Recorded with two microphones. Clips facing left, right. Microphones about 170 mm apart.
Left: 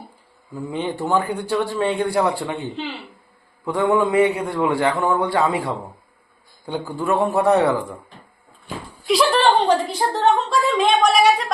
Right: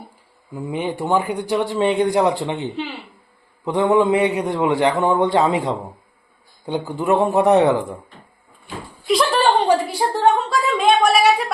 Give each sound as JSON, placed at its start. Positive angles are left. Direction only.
{"t": 0.5, "sound": "speech", "side_deg": -15}
{"t": 3.7, "sound": "a man's voice", "side_deg": -20}
{"t": 9.0, "sound": "a sound", "side_deg": 0}
{"t": 10.3, "sound": "a woman's voice", "side_deg": 0}